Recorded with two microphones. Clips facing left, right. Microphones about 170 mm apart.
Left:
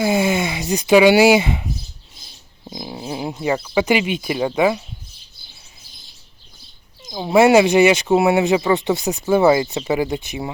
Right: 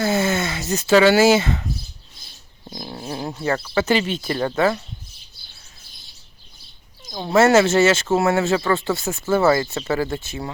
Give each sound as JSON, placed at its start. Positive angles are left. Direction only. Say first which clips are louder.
{"t": 0.0, "sound": "speech", "louder": "left 2 dB", "side_deg": 15}
{"t": 7.1, "sound": "speech", "louder": "left 3 dB", "side_deg": 15}